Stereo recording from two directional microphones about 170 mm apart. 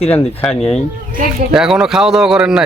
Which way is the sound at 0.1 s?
5° left (ahead or behind).